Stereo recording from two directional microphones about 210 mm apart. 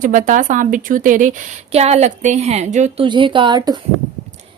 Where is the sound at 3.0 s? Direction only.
25° right (ahead or behind).